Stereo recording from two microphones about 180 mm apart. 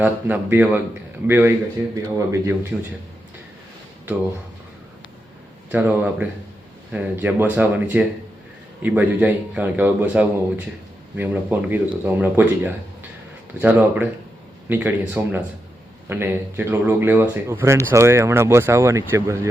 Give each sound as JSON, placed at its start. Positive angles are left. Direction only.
{"t": 0.0, "sound": "speech", "side_deg": -10}
{"t": 5.7, "sound": "speech", "side_deg": -10}